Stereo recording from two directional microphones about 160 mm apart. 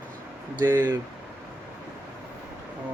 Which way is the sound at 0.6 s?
15° right (ahead or behind).